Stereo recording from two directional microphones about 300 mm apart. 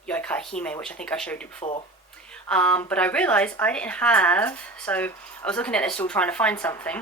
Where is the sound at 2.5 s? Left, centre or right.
Centre.